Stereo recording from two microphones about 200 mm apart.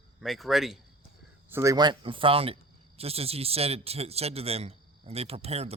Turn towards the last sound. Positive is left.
turn(degrees=-30)  # may be behind; listen again after turning